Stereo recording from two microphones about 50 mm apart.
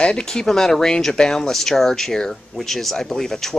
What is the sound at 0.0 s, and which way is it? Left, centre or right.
Speech, centre.